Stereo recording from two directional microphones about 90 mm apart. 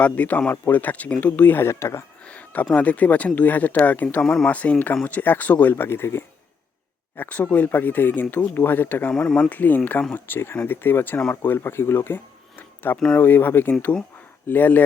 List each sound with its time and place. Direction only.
0.0 s speech: 15° left (ahead or behind)
2.2 s a sound: 15° left (ahead or behind)
2.7 s speech: 15° left (ahead or behind)
9.1 s speech: 10° left (ahead or behind)
11.5 s speech: 25° left (ahead or behind)